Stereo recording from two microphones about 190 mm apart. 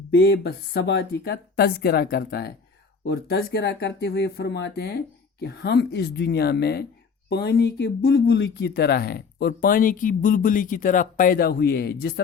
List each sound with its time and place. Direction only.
0.2 s speech: 60° left (ahead or behind)